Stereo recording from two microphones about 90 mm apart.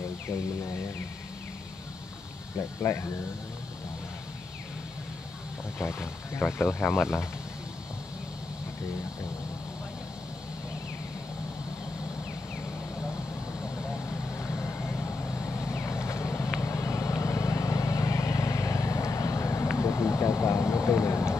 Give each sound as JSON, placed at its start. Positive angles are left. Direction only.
{"t": 2.5, "sound": "speech", "side_deg": 30}
{"t": 5.8, "sound": "speech", "side_deg": 30}
{"t": 14.0, "sound": "vehicle", "side_deg": 25}
{"t": 19.8, "sound": "a sound", "side_deg": 30}